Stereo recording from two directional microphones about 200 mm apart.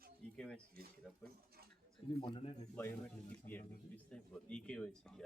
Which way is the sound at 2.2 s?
25° left (ahead or behind).